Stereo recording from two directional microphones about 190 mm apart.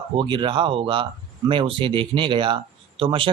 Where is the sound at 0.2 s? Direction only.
25° right (ahead or behind).